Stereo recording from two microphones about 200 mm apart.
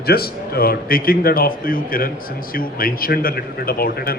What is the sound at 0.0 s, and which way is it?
A man's voice, 50° left (ahead or behind).